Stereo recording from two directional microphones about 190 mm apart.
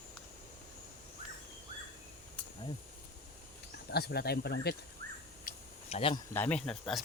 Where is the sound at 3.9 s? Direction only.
55° left (ahead or behind).